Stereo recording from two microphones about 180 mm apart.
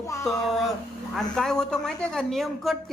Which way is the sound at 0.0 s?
15° left (ahead or behind).